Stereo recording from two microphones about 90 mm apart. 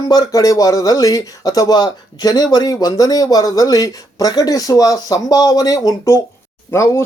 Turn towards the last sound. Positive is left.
turn(degrees=35)  # may be behind; listen again after turning